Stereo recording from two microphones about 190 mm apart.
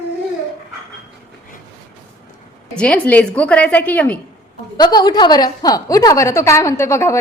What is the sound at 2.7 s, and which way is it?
A woman's voice, 5° left (ahead or behind).